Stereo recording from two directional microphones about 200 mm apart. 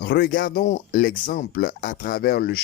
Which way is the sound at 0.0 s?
55° left (ahead or behind).